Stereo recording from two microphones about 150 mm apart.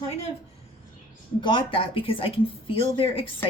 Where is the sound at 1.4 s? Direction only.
35° left (ahead or behind).